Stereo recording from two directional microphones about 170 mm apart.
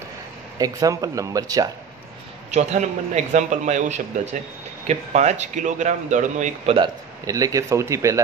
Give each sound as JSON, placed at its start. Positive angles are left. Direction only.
{"t": 0.6, "sound": "speech", "side_deg": -20}
{"t": 2.5, "sound": "a man's voice", "side_deg": -45}
{"t": 7.2, "sound": "speech", "side_deg": -20}